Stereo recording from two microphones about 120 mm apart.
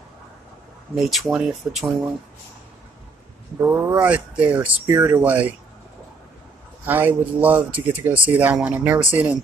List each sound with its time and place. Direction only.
0.9 s speech: centre (ahead or behind)
3.6 s speech: 20° right (ahead or behind)
4.6 s speech: 25° right (ahead or behind)
6.9 s speech: 15° right (ahead or behind)